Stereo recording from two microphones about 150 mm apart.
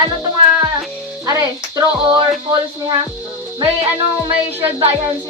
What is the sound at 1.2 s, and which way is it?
Speech, 25° right (ahead or behind).